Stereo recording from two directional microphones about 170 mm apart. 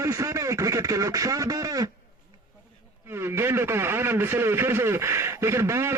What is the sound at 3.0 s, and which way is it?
Speech, 15° right (ahead or behind).